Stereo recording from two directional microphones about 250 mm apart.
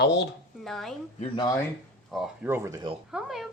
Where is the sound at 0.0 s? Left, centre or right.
Left.